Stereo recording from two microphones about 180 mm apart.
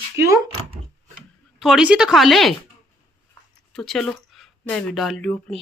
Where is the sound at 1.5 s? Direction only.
Centre (ahead or behind).